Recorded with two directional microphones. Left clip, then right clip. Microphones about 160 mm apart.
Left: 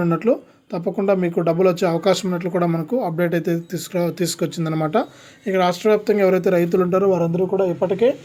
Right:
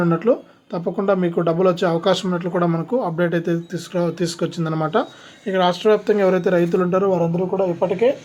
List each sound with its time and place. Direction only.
0.0 s speech: 35° left (ahead or behind)